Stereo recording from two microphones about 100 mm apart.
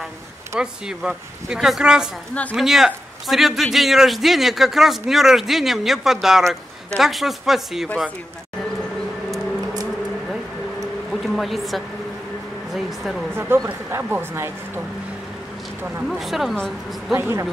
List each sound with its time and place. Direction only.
0.6 s a man's voice: 5° right (ahead or behind)
10.8 s a sound: centre (ahead or behind)
12.7 s a man's voice: centre (ahead or behind)
13.3 s speech: 25° right (ahead or behind)
16.1 s a man's voice: centre (ahead or behind)
17.1 s speech: 25° right (ahead or behind)